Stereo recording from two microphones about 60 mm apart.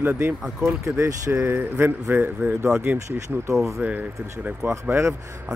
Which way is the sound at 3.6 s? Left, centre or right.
Centre.